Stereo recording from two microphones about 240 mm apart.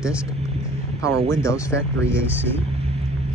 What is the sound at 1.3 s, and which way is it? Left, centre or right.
Speech, centre.